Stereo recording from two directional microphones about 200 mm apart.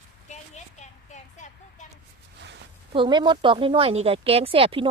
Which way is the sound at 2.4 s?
60° right (ahead or behind).